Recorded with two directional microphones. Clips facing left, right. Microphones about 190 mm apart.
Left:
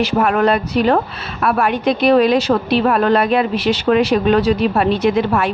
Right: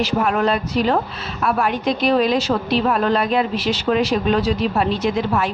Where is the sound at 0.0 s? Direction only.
60° left (ahead or behind).